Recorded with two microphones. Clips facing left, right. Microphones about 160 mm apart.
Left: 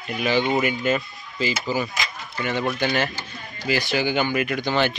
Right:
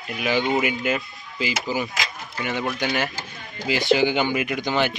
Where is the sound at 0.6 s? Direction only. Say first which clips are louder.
Left 2 dB; 10° right (ahead or behind).